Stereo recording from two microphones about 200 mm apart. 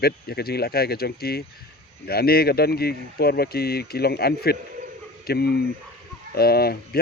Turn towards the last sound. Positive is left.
turn(degrees=50)  # may be behind; listen again after turning